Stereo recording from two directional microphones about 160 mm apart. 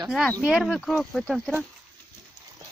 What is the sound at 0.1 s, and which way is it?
Speech, centre (ahead or behind).